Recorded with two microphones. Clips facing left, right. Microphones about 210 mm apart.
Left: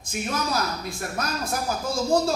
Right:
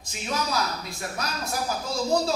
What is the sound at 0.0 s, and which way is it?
A man's voice, 50° left (ahead or behind).